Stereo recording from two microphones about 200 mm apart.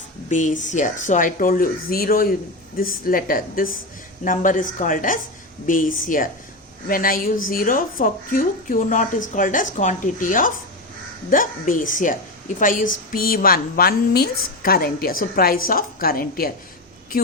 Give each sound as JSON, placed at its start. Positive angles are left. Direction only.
{"t": 0.3, "sound": "speech", "side_deg": 40}